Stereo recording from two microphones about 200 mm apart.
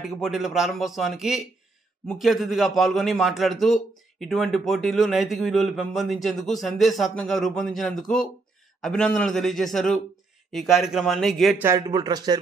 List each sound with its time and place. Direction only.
0.0 s a man's voice: centre (ahead or behind)
11.6 s speech: 15° right (ahead or behind)